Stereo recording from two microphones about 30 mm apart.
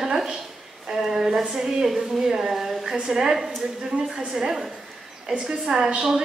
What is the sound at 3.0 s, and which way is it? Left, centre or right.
Speech, centre.